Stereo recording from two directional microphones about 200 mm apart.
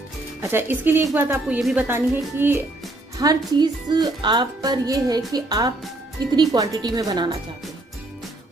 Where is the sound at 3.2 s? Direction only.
20° right (ahead or behind).